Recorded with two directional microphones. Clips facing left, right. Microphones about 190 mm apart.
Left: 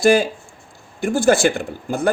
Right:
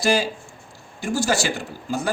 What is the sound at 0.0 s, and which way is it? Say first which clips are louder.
Speech: left 6 dB; 55° left (ahead or behind).